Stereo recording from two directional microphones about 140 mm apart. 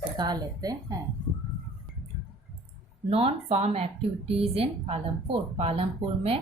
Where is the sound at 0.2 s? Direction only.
30° right (ahead or behind).